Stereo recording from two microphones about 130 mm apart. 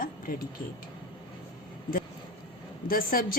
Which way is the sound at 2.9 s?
90° left.